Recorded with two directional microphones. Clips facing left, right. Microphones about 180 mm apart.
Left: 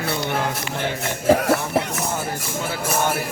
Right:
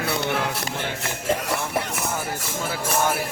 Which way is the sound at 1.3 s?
65° left (ahead or behind).